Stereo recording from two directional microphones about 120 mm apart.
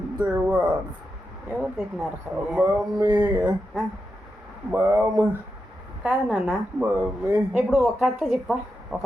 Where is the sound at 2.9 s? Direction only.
30° right (ahead or behind).